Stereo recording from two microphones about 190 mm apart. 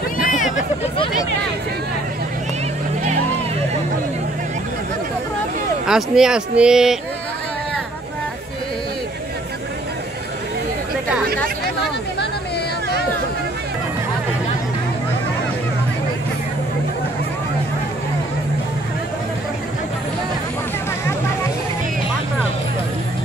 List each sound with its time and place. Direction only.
0.2 s vehicle: 45° left (ahead or behind)
5.9 s speech: 5° right (ahead or behind)